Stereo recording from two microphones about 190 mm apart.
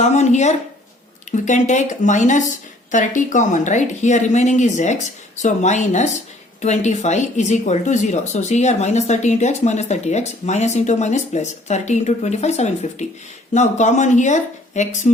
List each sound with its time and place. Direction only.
0.0 s speech: 35° left (ahead or behind)